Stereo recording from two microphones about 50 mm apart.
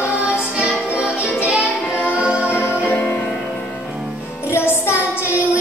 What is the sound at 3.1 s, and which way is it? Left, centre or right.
Music, left.